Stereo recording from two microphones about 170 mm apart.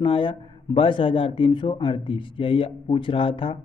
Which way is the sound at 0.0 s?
30° left (ahead or behind).